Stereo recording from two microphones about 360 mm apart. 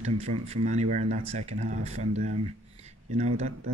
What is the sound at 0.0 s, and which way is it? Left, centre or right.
Speech, centre.